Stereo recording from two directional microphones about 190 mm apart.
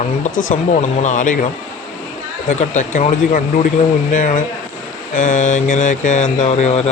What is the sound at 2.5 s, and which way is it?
Speech, 40° left (ahead or behind).